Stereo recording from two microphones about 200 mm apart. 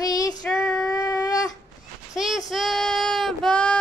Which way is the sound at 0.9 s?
20° left (ahead or behind).